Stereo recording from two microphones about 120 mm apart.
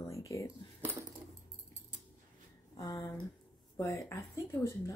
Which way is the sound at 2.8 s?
30° left (ahead or behind).